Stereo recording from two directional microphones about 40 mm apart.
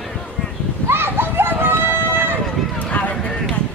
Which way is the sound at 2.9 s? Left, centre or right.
Left.